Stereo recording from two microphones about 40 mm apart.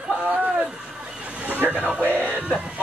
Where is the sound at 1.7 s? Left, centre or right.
Right.